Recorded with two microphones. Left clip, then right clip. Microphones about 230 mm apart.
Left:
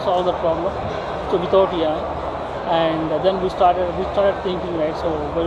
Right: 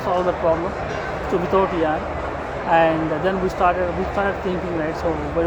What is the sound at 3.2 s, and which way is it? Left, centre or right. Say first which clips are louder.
Speech: left 3 dB; right.